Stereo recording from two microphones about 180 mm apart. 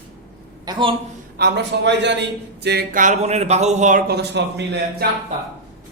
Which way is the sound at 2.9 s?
45° right (ahead or behind).